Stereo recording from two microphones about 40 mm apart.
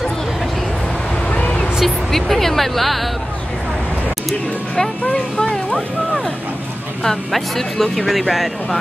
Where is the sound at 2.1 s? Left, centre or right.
Centre.